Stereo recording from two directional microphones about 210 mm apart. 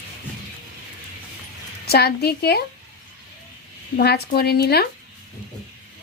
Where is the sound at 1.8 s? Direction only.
50° left (ahead or behind).